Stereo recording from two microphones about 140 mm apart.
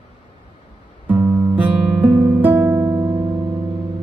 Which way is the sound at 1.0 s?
15° right (ahead or behind).